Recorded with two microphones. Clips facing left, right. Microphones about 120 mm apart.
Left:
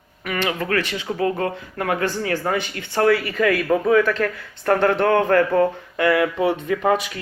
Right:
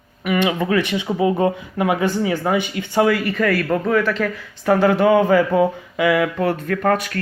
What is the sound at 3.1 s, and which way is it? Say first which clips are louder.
Speech: even; centre (ahead or behind).